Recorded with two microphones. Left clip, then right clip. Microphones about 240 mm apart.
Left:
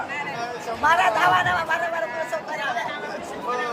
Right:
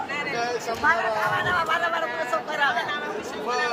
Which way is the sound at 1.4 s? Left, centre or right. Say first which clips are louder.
Left 2 dB; centre.